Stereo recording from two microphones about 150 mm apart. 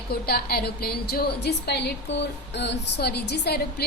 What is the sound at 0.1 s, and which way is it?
A woman's voice, 90° left.